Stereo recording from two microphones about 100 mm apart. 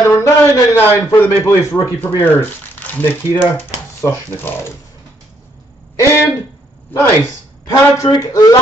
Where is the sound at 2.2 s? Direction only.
20° left (ahead or behind).